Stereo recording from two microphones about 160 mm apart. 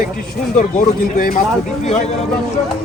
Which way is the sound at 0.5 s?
55° left (ahead or behind).